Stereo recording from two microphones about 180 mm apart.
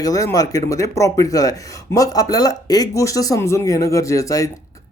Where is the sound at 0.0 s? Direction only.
20° left (ahead or behind).